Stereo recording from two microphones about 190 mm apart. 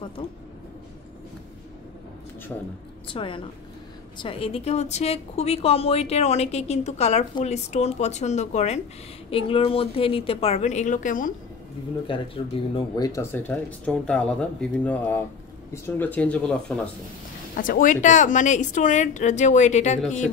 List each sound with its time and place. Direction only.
3.1 s a woman's voice: 25° left (ahead or behind); by 11.3 s 45° left (ahead or behind)
12.7 s speech: 20° left (ahead or behind); by 16.9 s 5° left (ahead or behind)
17.6 s a woman's voice: 45° left (ahead or behind)